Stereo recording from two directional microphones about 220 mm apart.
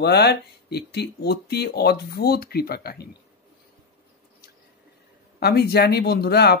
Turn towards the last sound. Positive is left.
turn(degrees=45)  # may be behind; listen again after turning